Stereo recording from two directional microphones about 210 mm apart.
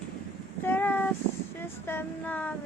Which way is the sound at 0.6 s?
10° left (ahead or behind).